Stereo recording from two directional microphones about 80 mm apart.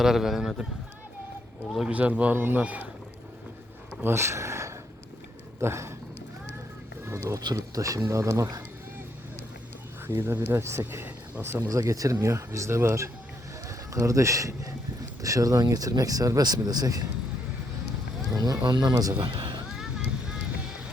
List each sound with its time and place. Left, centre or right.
0.0 s speech: centre
1.9 s a man's voice: centre
4.0 s speech: right
7.0 s speech: right
10.1 s speech: right
11.7 s speech: right
18.3 s speech: right
19.1 s speech: right
19.7 s vehicle: centre